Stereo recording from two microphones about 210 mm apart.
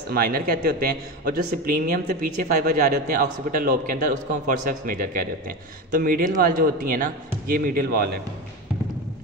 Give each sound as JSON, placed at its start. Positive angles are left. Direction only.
{"t": 0.1, "sound": "a man's voice", "side_deg": -45}